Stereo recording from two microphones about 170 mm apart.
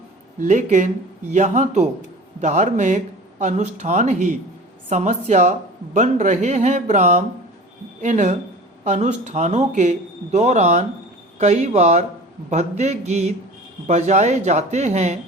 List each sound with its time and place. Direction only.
0.3 s a woman's voice: 45° right (ahead or behind)